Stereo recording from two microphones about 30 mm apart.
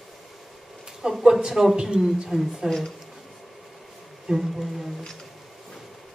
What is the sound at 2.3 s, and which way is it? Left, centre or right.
Speech, centre.